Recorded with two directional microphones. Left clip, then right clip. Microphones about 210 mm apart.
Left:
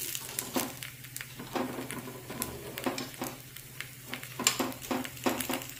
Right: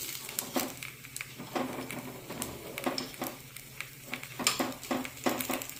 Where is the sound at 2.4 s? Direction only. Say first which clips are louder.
Even; 10° left (ahead or behind).